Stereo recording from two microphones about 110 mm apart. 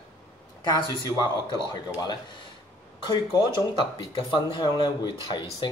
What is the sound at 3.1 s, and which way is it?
Speech, 45° left (ahead or behind).